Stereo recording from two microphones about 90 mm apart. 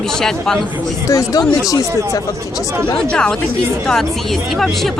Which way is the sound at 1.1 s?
35° left (ahead or behind).